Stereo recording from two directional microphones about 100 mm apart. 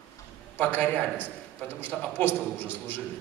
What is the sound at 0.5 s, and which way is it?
A man's voice, 15° left (ahead or behind).